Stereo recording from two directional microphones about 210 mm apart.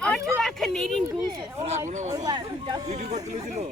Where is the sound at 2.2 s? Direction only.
20° right (ahead or behind).